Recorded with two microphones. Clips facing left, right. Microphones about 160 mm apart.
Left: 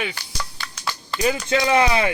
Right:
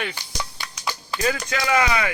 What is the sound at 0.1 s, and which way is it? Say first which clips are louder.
Music: even; 15° right (ahead or behind).